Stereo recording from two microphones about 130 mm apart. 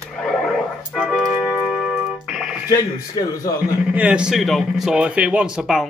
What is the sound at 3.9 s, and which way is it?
A man's voice, 10° right (ahead or behind).